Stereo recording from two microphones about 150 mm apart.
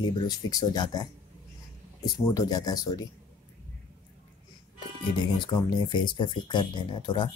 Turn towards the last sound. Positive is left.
turn(degrees=30)  # may be behind; listen again after turning